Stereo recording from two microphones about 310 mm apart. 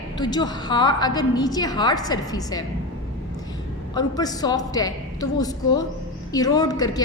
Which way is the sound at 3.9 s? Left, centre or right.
Centre.